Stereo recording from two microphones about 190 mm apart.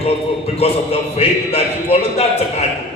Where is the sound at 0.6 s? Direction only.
35° left (ahead or behind).